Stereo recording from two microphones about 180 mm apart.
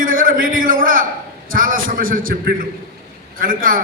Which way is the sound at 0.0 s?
50° right (ahead or behind).